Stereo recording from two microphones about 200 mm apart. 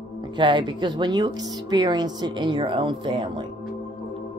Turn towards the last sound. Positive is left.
turn(degrees=-25)  # may be behind; listen again after turning